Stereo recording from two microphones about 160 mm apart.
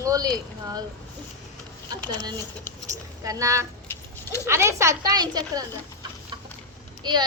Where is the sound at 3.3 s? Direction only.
20° right (ahead or behind).